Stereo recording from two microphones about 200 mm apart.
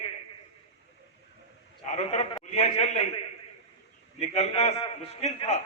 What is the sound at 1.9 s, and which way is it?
A man's voice, 35° left (ahead or behind).